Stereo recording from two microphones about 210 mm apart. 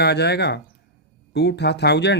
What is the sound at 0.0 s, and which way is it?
Speech, 50° left (ahead or behind).